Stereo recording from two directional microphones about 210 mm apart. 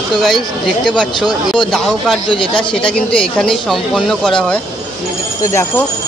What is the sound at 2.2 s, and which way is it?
Speech, 25° left (ahead or behind).